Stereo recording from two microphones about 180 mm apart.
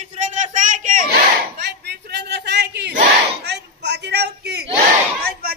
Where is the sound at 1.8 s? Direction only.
70° right (ahead or behind).